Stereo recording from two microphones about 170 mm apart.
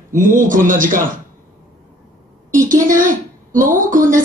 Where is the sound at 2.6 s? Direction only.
50° right (ahead or behind).